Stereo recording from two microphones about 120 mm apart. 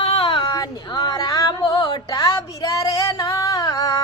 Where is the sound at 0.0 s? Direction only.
55° left (ahead or behind).